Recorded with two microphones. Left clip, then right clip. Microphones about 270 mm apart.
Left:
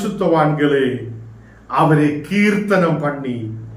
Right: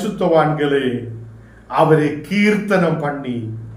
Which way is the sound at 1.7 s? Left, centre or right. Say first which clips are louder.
Right 1 dB; centre.